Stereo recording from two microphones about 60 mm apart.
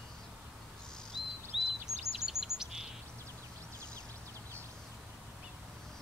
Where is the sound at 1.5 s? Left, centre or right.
Centre.